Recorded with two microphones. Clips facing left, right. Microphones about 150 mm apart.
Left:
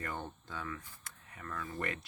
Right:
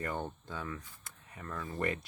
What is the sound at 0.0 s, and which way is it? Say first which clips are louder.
Speech: right 4 dB; 20° right (ahead or behind).